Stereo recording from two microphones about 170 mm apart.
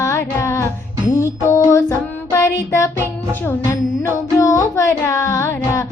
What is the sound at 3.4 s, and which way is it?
Speech, 15° left (ahead or behind).